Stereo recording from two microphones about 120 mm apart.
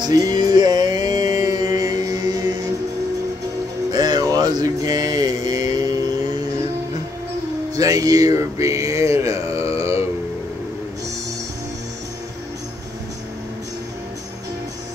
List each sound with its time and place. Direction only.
0.0 s music: 35° right (ahead or behind)
3.9 s mantra: 35° right (ahead or behind)
7.7 s a sound: 30° right (ahead or behind)